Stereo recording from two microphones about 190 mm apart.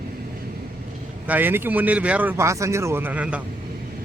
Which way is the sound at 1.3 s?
10° right (ahead or behind).